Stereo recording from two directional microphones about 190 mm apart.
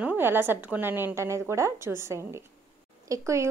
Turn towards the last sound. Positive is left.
turn(degrees=-15)  # may be behind; listen again after turning